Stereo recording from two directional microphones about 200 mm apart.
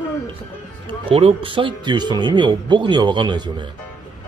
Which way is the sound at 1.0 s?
30° right (ahead or behind).